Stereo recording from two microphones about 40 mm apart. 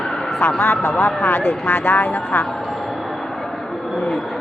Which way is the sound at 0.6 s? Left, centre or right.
Left.